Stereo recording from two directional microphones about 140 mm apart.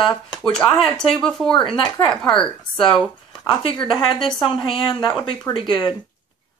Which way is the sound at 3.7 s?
35° left (ahead or behind).